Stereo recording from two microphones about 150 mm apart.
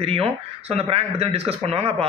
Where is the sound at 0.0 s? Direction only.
40° right (ahead or behind).